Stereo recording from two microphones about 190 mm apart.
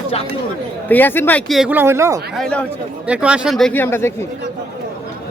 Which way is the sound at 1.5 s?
5° right (ahead or behind).